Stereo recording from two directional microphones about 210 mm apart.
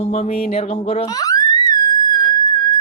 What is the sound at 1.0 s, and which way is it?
Theremin, 15° left (ahead or behind).